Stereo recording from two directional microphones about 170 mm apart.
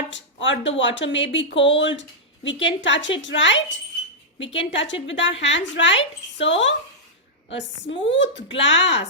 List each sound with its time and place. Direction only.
0.1 s speech: 90° left